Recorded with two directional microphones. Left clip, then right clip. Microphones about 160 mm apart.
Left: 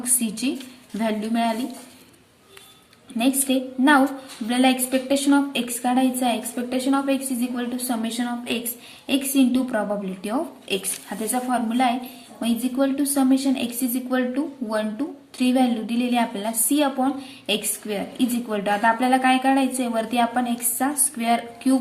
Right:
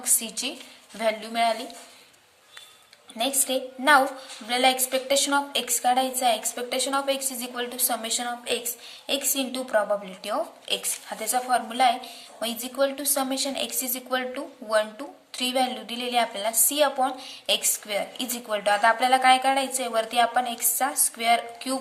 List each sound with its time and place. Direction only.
0.0 s a woman's voice: 15° right (ahead or behind)
3.2 s a woman's voice: 20° right (ahead or behind)